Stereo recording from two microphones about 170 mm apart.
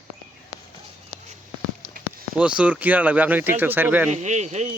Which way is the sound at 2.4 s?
5° right (ahead or behind).